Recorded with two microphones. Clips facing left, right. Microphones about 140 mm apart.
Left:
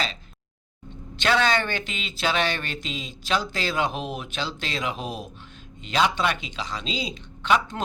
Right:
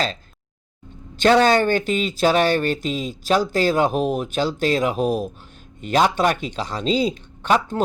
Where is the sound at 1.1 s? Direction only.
40° right (ahead or behind).